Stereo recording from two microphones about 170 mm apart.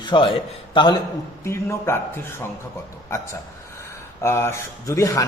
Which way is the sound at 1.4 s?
15° left (ahead or behind).